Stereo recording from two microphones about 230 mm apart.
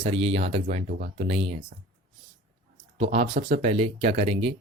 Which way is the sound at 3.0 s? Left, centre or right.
Right.